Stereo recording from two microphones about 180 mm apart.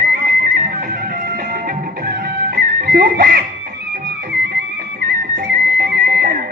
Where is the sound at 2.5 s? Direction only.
60° right (ahead or behind).